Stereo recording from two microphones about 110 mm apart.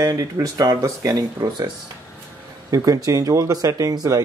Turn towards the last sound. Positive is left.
turn(degrees=-30)  # may be behind; listen again after turning